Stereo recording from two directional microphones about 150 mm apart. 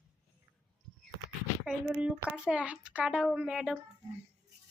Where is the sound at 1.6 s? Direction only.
10° right (ahead or behind).